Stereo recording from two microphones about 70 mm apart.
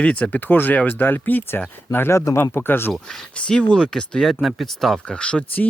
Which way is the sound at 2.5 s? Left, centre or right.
Left.